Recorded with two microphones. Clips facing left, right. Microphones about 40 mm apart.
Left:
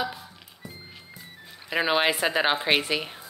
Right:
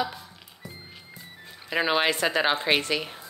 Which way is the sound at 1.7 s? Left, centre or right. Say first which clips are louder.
Left 1 dB; centre.